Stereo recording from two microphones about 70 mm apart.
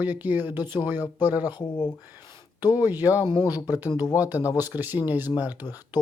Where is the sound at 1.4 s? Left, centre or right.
Left.